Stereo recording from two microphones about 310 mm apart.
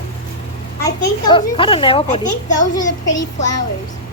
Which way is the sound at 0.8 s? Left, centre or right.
Centre.